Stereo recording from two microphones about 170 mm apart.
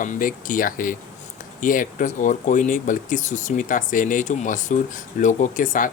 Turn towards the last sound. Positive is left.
turn(degrees=50)  # may be behind; listen again after turning